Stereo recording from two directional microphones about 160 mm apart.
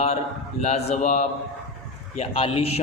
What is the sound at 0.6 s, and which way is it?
Speech, 40° left (ahead or behind).